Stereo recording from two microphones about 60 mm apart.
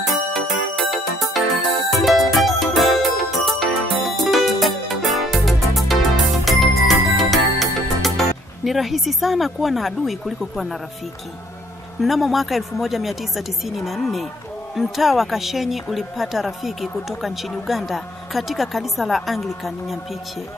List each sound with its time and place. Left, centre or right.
0.0 s music: centre
12.0 s a woman's voice: centre